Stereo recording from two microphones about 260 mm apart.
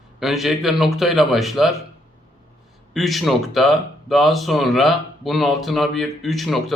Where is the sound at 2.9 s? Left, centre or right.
Centre.